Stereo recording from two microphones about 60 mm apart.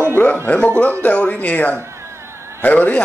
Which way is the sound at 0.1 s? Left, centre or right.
Left.